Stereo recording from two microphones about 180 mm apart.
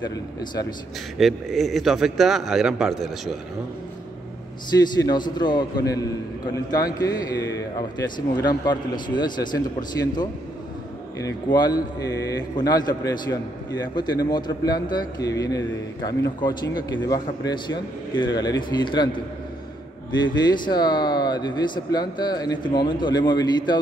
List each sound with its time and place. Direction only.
0.0 s a man's voice: 20° left (ahead or behind)
1.1 s a man's voice: centre (ahead or behind)
5.0 s a man's voice: 25° left (ahead or behind)
20.2 s a man's voice: 25° left (ahead or behind)